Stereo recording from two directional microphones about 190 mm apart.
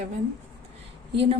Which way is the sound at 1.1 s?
30° right (ahead or behind).